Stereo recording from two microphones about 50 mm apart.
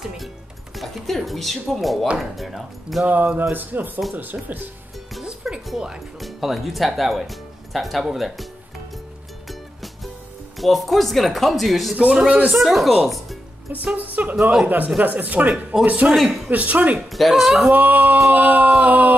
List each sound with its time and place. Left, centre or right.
0.7 s speech: centre
3.1 s a sound: right
5.4 s music: centre
6.2 s speech: centre
10.6 s speech: centre
12.0 s speech: right
12.5 s speech: centre
13.9 s a sound: right
15.8 s speech: right
16.2 s speech: centre
16.4 s a sound: right
17.1 s speech: centre
17.7 s a sound: right